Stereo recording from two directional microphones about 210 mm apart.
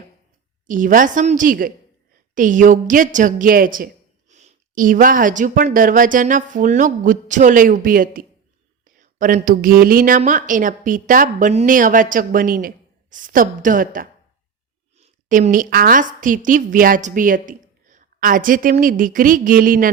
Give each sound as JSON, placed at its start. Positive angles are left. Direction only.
{"t": 0.7, "sound": "a woman's voice", "side_deg": -40}